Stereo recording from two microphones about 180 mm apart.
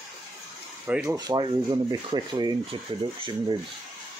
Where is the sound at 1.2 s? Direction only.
25° right (ahead or behind).